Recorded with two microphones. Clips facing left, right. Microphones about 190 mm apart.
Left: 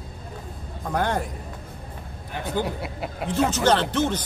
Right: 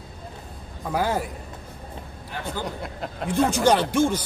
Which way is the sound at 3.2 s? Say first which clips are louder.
Right 1 dB; 10° right (ahead or behind).